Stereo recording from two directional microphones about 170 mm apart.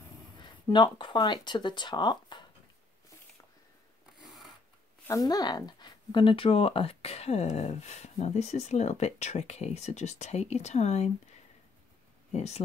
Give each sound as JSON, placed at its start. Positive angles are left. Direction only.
{"t": 0.4, "sound": "speech", "side_deg": 25}
{"t": 4.0, "sound": "filing", "side_deg": 0}
{"t": 5.0, "sound": "speech", "side_deg": 20}
{"t": 12.3, "sound": "speech", "side_deg": 40}